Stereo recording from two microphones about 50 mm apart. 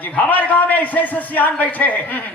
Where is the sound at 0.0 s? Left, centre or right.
Left.